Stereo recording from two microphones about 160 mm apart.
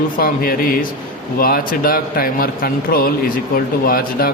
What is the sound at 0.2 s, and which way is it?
Speech, 65° left (ahead or behind).